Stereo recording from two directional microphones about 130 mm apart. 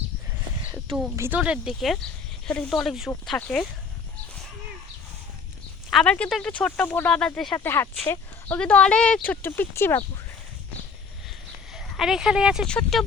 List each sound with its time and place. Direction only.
1.1 s speech: 20° right (ahead or behind)
1.4 s speech: 5° right (ahead or behind)
5.9 s speech: 5° left (ahead or behind)
11.7 s speech: centre (ahead or behind)